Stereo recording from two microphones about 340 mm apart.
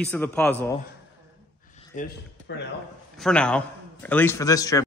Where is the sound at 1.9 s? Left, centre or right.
Left.